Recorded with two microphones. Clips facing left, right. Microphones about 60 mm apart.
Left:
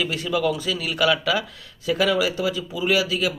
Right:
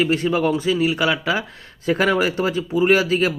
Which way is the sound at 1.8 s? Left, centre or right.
Right.